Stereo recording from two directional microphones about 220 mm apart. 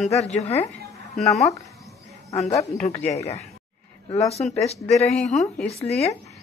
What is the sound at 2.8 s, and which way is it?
Speech, 30° left (ahead or behind).